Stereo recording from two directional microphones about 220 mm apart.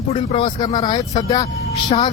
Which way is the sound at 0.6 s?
20° left (ahead or behind).